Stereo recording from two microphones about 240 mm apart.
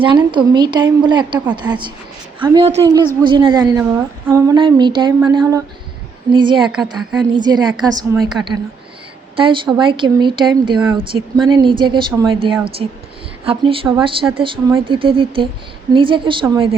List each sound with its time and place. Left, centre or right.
0.0 s a woman's voice: centre
6.6 s a woman's voice: centre
7.3 s a woman's voice: centre
8.2 s a woman's voice: centre
9.3 s a woman's voice: right